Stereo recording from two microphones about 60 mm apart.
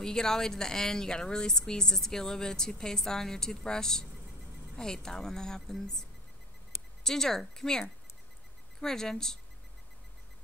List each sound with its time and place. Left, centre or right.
0.0 s speech: centre
7.0 s speech: centre